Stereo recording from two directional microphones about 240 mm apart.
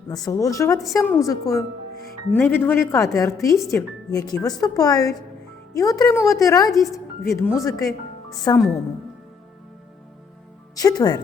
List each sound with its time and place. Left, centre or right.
0.1 s speech: centre
10.8 s speech: centre